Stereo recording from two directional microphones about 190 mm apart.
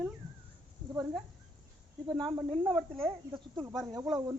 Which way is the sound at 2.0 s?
Centre (ahead or behind).